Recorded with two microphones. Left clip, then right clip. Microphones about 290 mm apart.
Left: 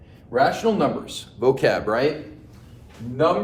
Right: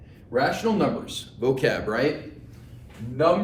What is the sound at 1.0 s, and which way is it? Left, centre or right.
Speech, centre.